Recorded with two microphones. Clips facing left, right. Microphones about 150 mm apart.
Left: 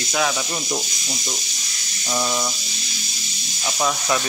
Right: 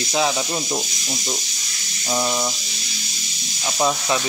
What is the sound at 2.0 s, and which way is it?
Speech, 15° right (ahead or behind).